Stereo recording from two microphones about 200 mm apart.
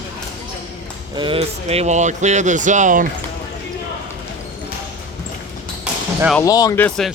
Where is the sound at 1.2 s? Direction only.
25° right (ahead or behind).